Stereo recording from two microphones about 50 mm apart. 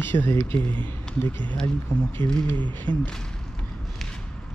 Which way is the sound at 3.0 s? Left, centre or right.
Centre.